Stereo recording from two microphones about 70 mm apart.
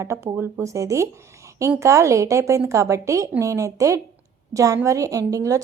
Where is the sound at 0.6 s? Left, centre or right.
Right.